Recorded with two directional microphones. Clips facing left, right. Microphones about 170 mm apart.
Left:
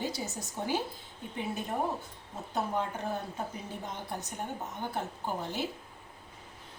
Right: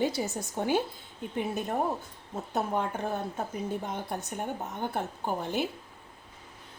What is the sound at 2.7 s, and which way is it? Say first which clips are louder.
Speech: right 3 dB; 55° right (ahead or behind).